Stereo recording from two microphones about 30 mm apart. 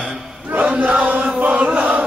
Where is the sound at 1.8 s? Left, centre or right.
Right.